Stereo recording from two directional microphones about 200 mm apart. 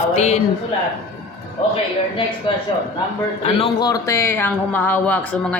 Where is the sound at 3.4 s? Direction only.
25° left (ahead or behind).